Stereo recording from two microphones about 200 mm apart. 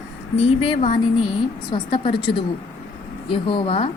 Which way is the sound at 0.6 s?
30° left (ahead or behind).